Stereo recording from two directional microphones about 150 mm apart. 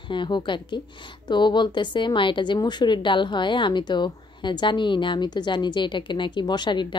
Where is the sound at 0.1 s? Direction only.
30° left (ahead or behind).